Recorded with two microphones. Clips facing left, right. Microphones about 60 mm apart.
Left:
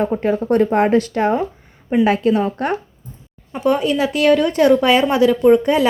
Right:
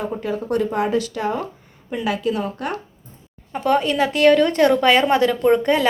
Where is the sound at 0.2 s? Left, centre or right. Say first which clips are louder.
Left 6 dB; left.